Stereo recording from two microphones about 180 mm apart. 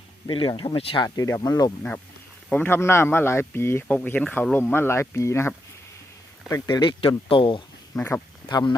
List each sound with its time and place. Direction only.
0.3 s speech: 25° left (ahead or behind)
1.0 s speech: 20° left (ahead or behind)
7.9 s speech: 10° left (ahead or behind)
8.4 s speech: 25° left (ahead or behind)